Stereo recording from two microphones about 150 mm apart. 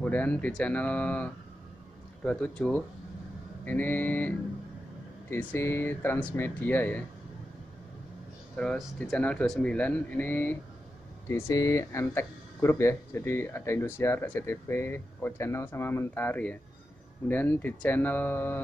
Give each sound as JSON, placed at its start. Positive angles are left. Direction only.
{"t": 0.0, "sound": "speech", "side_deg": 10}
{"t": 8.5, "sound": "speech", "side_deg": 5}